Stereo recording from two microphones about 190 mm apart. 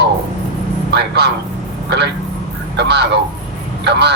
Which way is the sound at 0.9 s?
60° right (ahead or behind).